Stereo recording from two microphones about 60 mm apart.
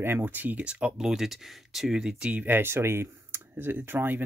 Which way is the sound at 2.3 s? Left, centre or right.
Right.